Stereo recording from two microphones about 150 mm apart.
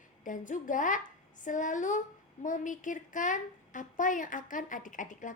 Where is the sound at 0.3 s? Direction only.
60° left (ahead or behind).